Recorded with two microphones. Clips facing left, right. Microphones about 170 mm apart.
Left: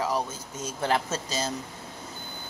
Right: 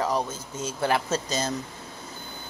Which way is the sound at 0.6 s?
20° left (ahead or behind).